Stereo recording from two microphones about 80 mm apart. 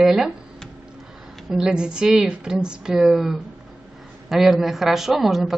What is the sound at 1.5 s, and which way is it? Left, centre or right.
A woman's voice, centre.